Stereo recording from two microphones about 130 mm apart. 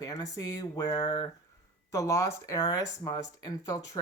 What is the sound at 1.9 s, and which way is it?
Speech, 25° left (ahead or behind).